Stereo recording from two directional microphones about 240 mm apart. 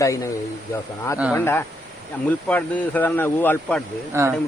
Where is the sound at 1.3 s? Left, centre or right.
Centre.